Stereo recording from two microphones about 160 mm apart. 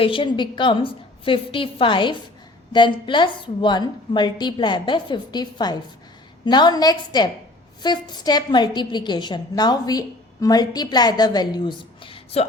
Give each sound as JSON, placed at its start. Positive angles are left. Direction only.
{"t": 0.0, "sound": "a woman's voice", "side_deg": 30}